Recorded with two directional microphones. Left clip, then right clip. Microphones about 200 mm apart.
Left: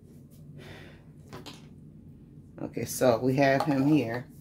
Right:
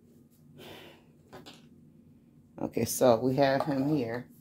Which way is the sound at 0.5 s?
35° right (ahead or behind).